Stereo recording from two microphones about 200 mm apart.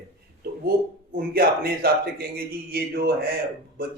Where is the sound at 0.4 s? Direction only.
50° right (ahead or behind).